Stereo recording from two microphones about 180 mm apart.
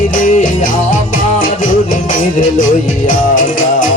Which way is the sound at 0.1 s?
45° left (ahead or behind).